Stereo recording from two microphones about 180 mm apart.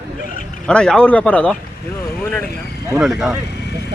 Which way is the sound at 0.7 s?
5° left (ahead or behind).